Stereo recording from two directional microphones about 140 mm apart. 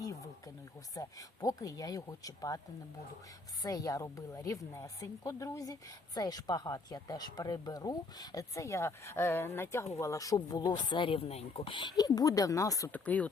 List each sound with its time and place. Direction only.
0.0 s wild animals: 25° left (ahead or behind)
0.9 s speech: 25° left (ahead or behind)
3.6 s speech: 25° left (ahead or behind)
12.9 s speech: 10° left (ahead or behind)